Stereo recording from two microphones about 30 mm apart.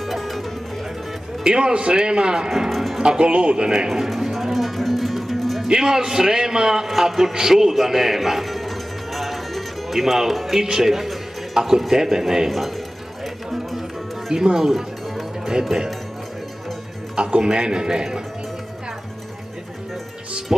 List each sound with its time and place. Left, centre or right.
0.0 s music: centre
1.4 s a man's voice: right
2.7 s music: centre
3.0 s speech: right
3.6 s a man's voice: right
4.1 s music: centre
5.7 s a man's voice: right
6.9 s music: centre
10.6 s speech: centre
14.3 s a man's voice: right
14.7 s music: centre
17.1 s a man's voice: right